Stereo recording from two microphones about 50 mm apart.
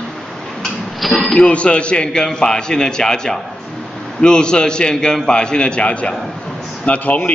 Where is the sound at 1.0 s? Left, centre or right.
Centre.